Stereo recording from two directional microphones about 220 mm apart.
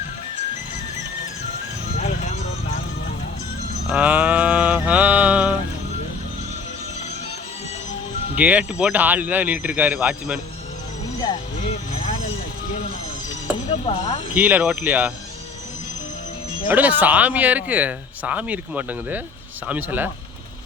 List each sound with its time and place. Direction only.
2.0 s music: 30° left (ahead or behind)
3.8 s a sound: 5° right (ahead or behind)
8.4 s speech: 5° right (ahead or behind)
13.8 s speech: 30° left (ahead or behind)
14.3 s speech: 10° right (ahead or behind)
16.6 s speech: 5° right (ahead or behind)